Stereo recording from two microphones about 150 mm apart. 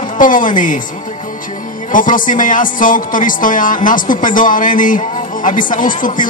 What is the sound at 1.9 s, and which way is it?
Speech, 60° left (ahead or behind).